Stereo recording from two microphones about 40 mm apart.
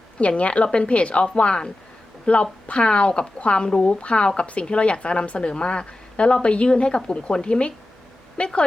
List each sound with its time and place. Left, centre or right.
0.2 s a woman's voice: left